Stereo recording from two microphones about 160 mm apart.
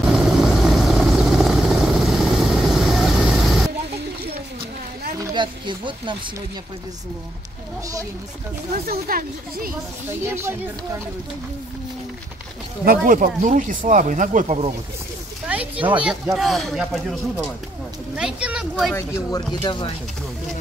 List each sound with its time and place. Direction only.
0.0 s vehicle: centre (ahead or behind)
5.2 s a sound: 30° right (ahead or behind)
8.7 s speech: 65° right (ahead or behind)
10.2 s speech: 15° right (ahead or behind)
12.8 s speech: 65° right (ahead or behind)
15.4 s speech: 10° right (ahead or behind)
18.9 s speech: 15° left (ahead or behind)
19.6 s speech: 30° left (ahead or behind)